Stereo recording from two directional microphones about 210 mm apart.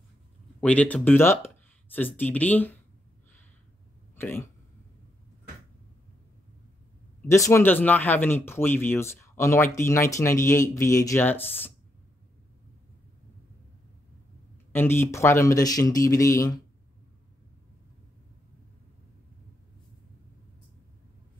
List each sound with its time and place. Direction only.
0.6 s speech: 5° left (ahead or behind)
4.1 s speech: 10° left (ahead or behind)
7.2 s speech: 15° left (ahead or behind)
14.7 s speech: 10° left (ahead or behind)